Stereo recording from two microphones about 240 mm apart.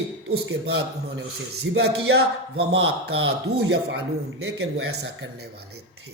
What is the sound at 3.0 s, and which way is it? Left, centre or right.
Speech, right.